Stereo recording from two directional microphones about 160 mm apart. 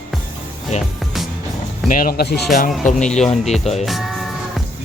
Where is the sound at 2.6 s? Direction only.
55° left (ahead or behind).